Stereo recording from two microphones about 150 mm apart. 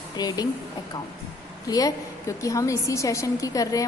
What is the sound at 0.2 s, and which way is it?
Speech, 25° left (ahead or behind).